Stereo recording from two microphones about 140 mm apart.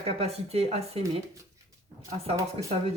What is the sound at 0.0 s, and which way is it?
Speech, 45° right (ahead or behind).